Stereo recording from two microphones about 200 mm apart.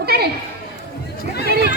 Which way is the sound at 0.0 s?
50° right (ahead or behind).